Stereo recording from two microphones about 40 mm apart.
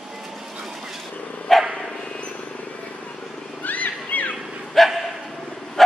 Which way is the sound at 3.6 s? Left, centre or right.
Left.